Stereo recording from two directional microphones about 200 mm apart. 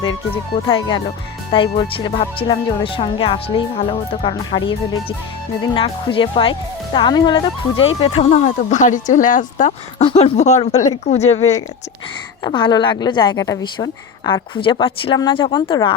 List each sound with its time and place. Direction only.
0.7 s speech: 25° left (ahead or behind)